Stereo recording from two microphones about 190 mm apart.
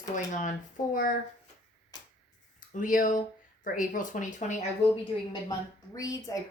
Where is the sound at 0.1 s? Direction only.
40° left (ahead or behind).